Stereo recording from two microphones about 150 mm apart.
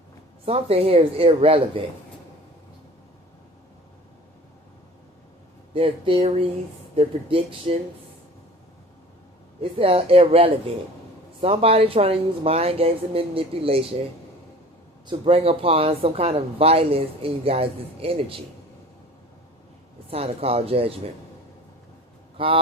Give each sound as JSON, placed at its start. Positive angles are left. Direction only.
{"t": 0.4, "sound": "speech", "side_deg": -40}
{"t": 5.7, "sound": "speech", "side_deg": -35}
{"t": 9.7, "sound": "speech", "side_deg": -40}
{"t": 15.0, "sound": "speech", "side_deg": -40}
{"t": 20.1, "sound": "speech", "side_deg": -40}
{"t": 22.4, "sound": "speech", "side_deg": -35}